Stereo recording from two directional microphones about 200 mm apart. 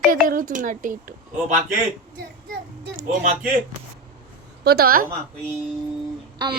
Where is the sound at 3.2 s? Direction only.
45° right (ahead or behind).